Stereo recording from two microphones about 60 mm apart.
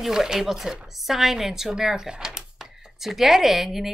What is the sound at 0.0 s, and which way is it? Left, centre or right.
Speech, centre.